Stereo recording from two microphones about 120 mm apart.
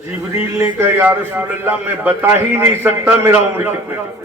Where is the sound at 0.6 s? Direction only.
20° right (ahead or behind).